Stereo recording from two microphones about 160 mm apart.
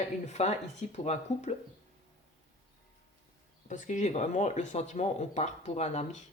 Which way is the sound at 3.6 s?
50° left (ahead or behind).